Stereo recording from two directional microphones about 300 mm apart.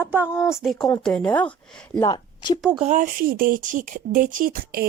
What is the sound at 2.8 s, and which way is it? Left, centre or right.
Speech, right.